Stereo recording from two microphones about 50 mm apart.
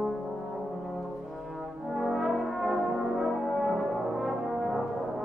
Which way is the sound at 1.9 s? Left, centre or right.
Centre.